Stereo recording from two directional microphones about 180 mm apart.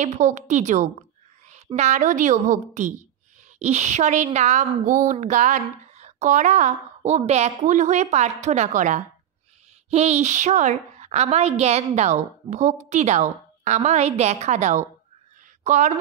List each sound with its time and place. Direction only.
0.0 s a woman's voice: 45° right (ahead or behind)